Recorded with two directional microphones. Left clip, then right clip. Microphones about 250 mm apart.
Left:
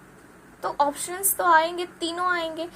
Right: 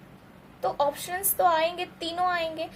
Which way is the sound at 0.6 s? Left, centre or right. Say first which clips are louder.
Left 2 dB; centre.